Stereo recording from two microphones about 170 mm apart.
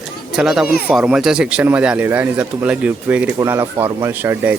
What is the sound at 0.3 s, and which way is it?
Speech, centre (ahead or behind).